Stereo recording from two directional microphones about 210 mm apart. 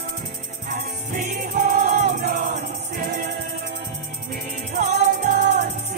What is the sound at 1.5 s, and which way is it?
Music, 40° right (ahead or behind).